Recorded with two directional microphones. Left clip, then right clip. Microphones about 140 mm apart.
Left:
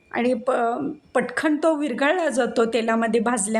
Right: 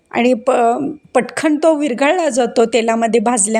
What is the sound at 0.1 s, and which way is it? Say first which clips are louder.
A woman's voice: right 8 dB; 50° right (ahead or behind).